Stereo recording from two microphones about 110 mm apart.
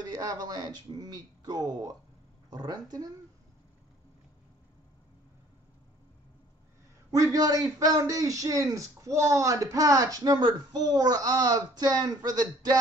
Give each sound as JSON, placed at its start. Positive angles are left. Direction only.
{"t": 0.0, "sound": "a man's voice", "side_deg": -35}
{"t": 7.1, "sound": "a man's voice", "side_deg": -30}